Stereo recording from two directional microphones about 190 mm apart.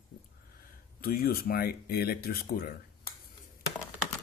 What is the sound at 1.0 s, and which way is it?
Speech, 55° left (ahead or behind).